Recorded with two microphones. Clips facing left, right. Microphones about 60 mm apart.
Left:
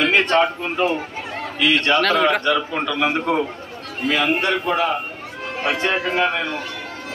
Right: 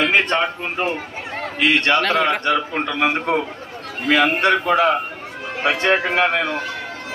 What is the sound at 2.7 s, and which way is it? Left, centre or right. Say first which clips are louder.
Speech: right 1 dB; right.